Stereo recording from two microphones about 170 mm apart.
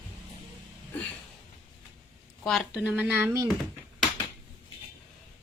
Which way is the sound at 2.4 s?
Centre (ahead or behind).